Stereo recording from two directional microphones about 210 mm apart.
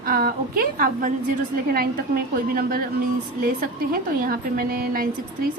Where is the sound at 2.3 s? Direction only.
45° right (ahead or behind).